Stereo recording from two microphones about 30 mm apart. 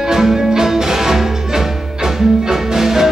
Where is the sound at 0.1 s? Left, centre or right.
Centre.